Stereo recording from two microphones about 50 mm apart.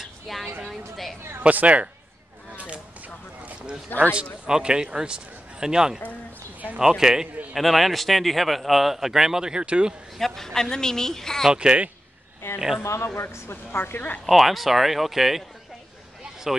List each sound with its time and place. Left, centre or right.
0.3 s speech: centre
1.4 s speech: right
2.5 s a sound: right
4.1 s a man's voice: centre
7.0 s a man's voice: centre
7.5 s speech: centre
10.1 s a woman's voice: centre
11.5 s a man's voice: centre
12.4 s speech: left
12.8 s speech: left
13.3 s speech: left
14.2 s speech: centre
16.5 s a man's voice: centre